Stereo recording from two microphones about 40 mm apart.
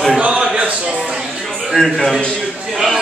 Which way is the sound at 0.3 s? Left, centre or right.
Right.